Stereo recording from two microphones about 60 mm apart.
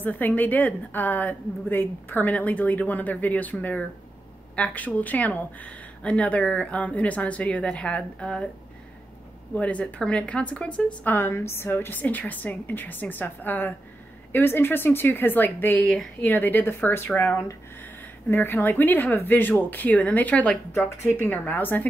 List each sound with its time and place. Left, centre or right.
0.0 s speech: left
9.6 s speech: left
11.1 s a woman's voice: left
18.3 s a woman's voice: left